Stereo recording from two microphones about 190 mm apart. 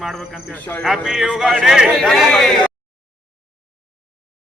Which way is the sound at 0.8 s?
Centre (ahead or behind).